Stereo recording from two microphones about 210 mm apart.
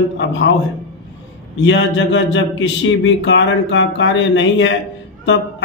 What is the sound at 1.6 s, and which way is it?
A man's voice, 60° left (ahead or behind).